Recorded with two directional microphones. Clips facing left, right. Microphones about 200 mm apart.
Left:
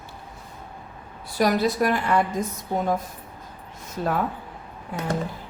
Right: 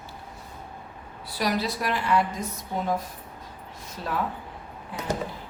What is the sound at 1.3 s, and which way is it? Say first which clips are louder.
Speech: left 6 dB; 50° left (ahead or behind).